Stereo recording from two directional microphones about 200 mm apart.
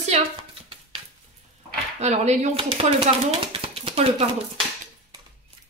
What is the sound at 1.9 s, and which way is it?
Speech, 35° right (ahead or behind).